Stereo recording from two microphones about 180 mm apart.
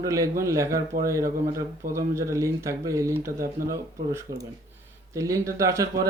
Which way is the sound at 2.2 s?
15° right (ahead or behind).